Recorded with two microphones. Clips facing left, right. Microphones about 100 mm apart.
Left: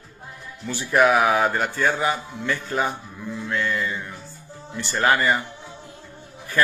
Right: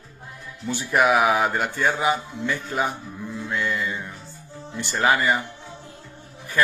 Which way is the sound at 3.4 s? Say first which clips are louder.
Left 1 dB; 10° right (ahead or behind).